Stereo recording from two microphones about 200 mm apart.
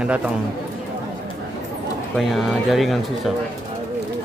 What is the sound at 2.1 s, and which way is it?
Mantra, centre (ahead or behind).